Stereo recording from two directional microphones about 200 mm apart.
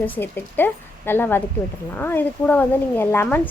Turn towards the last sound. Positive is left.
turn(degrees=10)  # may be behind; listen again after turning